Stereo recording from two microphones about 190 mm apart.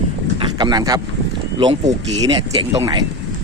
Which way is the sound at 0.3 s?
20° right (ahead or behind).